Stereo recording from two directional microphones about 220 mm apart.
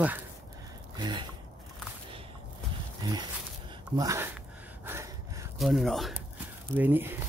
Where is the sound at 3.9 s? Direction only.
15° right (ahead or behind).